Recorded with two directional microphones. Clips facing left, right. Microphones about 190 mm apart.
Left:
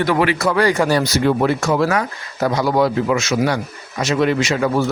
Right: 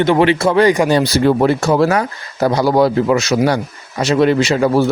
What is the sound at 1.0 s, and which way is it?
Speech, 35° right (ahead or behind).